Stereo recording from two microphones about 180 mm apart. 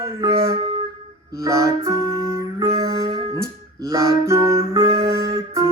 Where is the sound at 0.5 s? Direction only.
25° right (ahead or behind).